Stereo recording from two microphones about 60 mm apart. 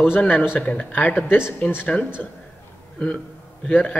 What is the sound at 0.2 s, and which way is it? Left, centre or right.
Speech, left.